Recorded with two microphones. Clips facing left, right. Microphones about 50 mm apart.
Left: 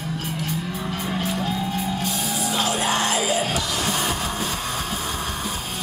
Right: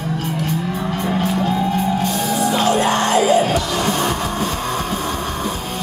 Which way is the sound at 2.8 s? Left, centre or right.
Centre.